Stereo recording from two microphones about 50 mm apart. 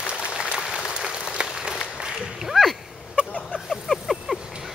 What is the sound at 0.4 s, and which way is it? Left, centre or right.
Applause, centre.